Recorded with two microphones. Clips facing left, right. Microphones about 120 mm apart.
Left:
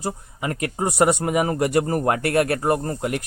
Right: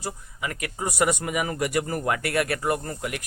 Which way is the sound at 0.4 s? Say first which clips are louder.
Left 6 dB; 35° left (ahead or behind).